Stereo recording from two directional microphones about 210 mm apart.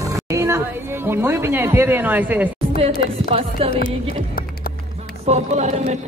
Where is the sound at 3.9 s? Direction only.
45° left (ahead or behind).